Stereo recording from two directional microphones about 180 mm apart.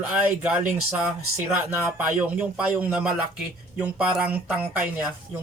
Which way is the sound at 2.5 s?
5° right (ahead or behind).